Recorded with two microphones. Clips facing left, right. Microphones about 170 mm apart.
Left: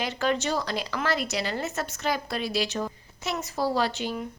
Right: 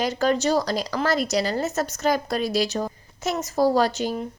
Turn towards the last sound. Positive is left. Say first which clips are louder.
# right 5 dB
turn(degrees=-40)  # may be behind; listen again after turning